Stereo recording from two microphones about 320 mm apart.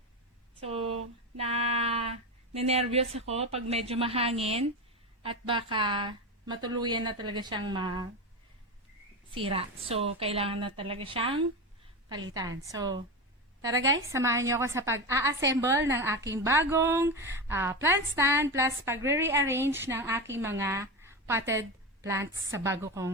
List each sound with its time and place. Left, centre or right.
0.6 s a sound: centre
2.5 s a woman's voice: centre
9.3 s a woman's voice: centre